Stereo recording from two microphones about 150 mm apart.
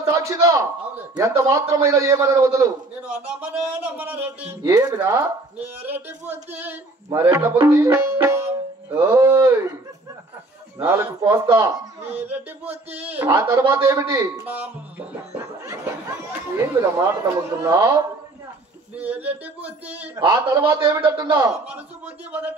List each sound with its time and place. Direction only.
0.0 s a man's voice: 20° right (ahead or behind)
3.2 s speech: 10° right (ahead or behind)
4.6 s a man's voice: 25° right (ahead or behind)
10.8 s a man's voice: 15° right (ahead or behind)
21.6 s speech: 10° right (ahead or behind)